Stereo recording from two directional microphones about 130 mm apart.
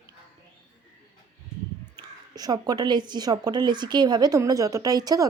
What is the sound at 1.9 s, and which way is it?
Speech, 30° right (ahead or behind).